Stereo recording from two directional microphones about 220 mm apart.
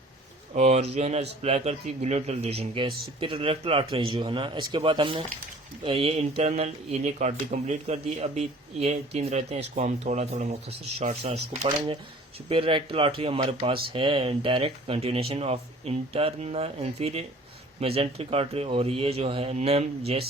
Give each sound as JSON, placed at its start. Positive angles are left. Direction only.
{"t": 0.5, "sound": "speech", "side_deg": -30}